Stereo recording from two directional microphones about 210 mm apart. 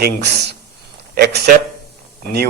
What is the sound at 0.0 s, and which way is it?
A man's voice, 50° right (ahead or behind).